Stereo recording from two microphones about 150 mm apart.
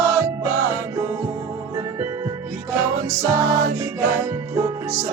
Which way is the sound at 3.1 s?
25° right (ahead or behind).